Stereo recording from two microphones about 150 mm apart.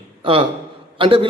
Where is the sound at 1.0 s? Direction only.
35° right (ahead or behind).